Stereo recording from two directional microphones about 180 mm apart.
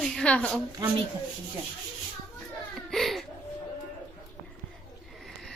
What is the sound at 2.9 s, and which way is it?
Laughter, centre (ahead or behind).